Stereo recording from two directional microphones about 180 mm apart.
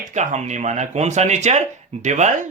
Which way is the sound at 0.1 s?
40° right (ahead or behind).